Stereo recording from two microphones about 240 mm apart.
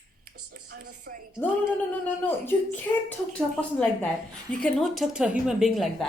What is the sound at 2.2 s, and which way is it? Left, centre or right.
A woman's voice, centre.